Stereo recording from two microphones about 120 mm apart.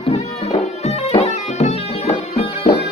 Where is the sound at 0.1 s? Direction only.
65° left (ahead or behind).